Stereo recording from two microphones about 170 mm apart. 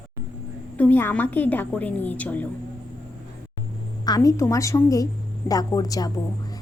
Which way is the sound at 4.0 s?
20° left (ahead or behind).